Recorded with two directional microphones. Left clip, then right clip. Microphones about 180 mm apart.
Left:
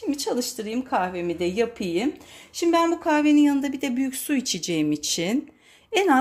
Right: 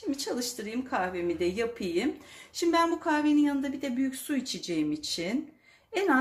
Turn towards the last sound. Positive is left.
turn(degrees=40)  # may be behind; listen again after turning